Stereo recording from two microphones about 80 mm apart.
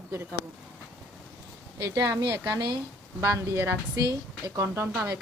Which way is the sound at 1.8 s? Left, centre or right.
Right.